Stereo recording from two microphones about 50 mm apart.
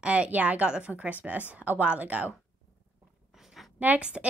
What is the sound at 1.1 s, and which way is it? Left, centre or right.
Speech, right.